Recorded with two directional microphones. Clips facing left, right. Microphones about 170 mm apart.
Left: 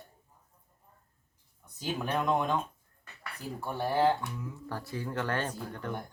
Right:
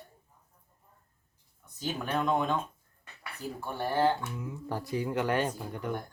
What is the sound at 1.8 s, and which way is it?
Speech, 10° left (ahead or behind).